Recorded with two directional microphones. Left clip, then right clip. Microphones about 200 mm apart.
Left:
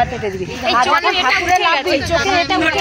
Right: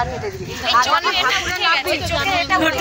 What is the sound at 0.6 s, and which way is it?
A woman's voice, 30° left (ahead or behind).